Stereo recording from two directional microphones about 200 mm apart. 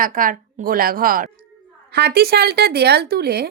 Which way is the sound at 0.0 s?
40° right (ahead or behind).